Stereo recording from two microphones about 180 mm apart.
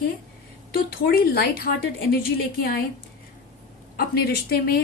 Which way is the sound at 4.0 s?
60° left (ahead or behind).